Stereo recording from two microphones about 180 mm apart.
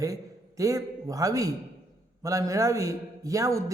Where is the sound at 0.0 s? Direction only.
20° right (ahead or behind).